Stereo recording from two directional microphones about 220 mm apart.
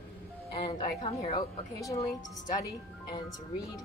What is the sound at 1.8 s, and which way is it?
Speech, 15° left (ahead or behind).